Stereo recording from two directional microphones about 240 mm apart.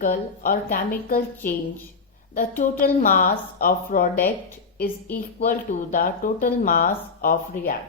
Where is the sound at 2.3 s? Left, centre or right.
Left.